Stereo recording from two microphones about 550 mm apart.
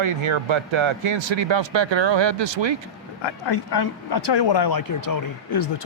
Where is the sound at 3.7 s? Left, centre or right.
Left.